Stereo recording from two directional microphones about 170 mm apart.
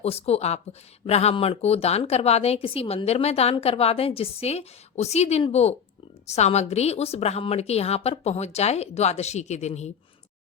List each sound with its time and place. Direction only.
0.0 s speech: 35° left (ahead or behind)